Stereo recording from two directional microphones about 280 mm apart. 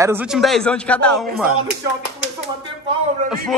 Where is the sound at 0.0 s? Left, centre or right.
Centre.